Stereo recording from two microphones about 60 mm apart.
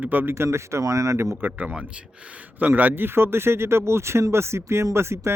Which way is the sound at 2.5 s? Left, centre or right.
Right.